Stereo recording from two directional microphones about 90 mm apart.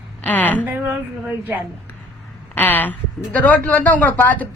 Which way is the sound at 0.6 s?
20° right (ahead or behind).